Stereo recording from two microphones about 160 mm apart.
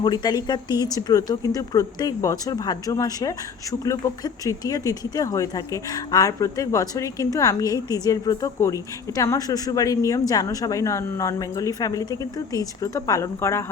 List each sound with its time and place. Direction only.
0.0 s speech: 25° left (ahead or behind)